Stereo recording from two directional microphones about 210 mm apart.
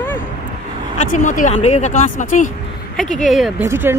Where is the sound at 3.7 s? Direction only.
10° right (ahead or behind).